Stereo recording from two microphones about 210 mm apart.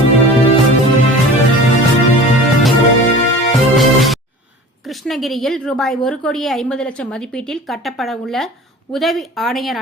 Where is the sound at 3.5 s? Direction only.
Centre (ahead or behind).